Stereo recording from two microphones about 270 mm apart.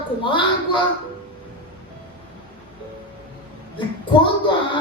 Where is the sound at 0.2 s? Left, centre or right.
Centre.